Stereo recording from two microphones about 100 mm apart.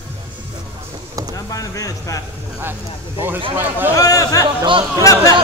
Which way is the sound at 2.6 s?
20° right (ahead or behind).